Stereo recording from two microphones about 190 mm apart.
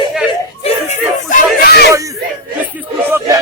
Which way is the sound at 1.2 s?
50° left (ahead or behind).